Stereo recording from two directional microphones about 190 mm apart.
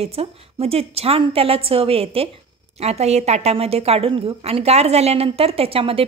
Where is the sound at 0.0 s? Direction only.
30° right (ahead or behind).